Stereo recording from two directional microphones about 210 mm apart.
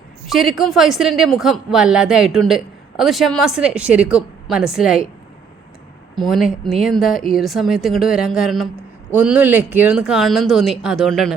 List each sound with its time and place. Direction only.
0.3 s speech: centre (ahead or behind)
6.1 s speech: centre (ahead or behind)